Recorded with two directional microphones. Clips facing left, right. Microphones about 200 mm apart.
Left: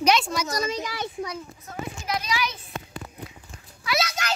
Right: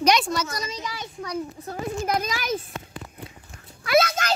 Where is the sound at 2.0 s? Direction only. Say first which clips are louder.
Even; 50° right (ahead or behind).